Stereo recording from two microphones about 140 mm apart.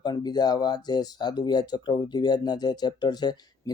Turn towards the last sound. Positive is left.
turn(degrees=30)  # may be behind; listen again after turning